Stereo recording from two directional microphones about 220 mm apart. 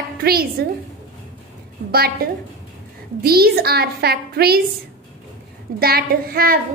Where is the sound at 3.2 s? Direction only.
45° right (ahead or behind).